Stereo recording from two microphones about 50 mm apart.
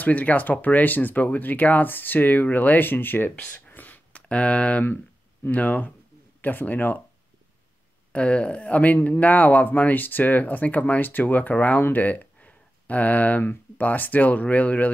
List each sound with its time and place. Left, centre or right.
0.0 s speech: left
4.1 s speech: left
8.1 s speech: left